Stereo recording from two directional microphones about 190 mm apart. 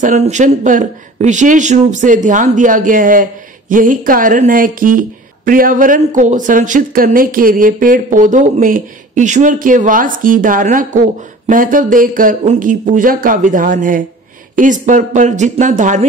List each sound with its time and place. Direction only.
0.0 s speech: 40° right (ahead or behind)